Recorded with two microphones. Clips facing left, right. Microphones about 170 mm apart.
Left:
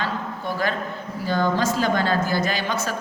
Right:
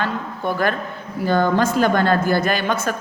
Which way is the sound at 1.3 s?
55° right (ahead or behind).